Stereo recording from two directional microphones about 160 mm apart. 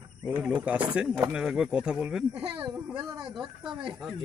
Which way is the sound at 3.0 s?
25° right (ahead or behind).